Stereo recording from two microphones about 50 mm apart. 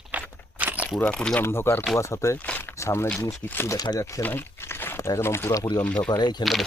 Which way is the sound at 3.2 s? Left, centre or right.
Left.